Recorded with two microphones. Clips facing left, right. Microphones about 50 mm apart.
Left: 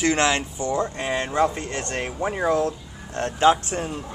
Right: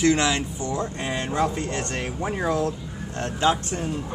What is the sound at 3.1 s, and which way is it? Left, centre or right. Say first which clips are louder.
Speech: left 4 dB; left.